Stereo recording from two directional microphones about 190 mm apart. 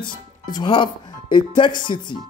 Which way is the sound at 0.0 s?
25° left (ahead or behind).